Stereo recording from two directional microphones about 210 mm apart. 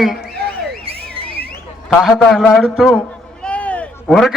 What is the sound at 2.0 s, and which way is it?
A man's voice, centre (ahead or behind).